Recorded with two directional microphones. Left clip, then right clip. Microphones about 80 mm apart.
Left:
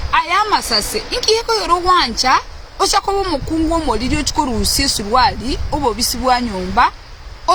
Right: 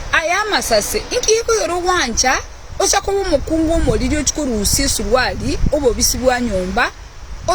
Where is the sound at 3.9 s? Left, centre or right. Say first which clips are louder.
Even; left.